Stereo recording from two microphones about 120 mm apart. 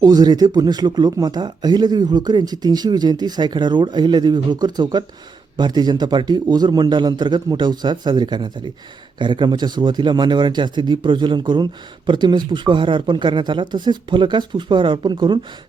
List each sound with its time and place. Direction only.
0.0 s speech: 35° right (ahead or behind)